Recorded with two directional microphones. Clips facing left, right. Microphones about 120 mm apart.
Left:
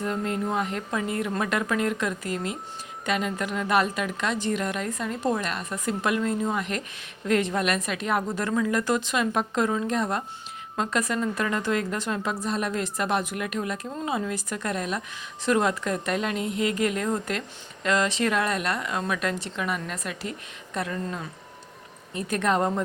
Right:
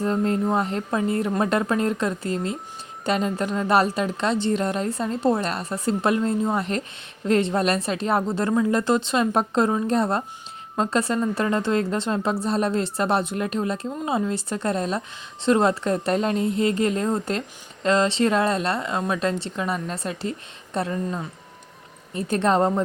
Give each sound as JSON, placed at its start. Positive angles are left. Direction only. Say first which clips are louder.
{"t": 0.0, "sound": "a woman's voice", "louder": "right 5 dB", "side_deg": -35}